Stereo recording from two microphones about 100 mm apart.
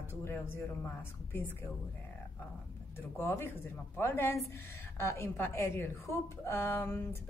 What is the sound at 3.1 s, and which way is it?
A woman's voice, 25° left (ahead or behind).